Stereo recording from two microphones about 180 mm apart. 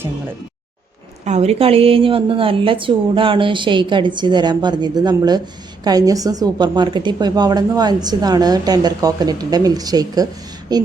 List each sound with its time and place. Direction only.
1.2 s a woman's voice: 40° right (ahead or behind); by 10.8 s 25° right (ahead or behind)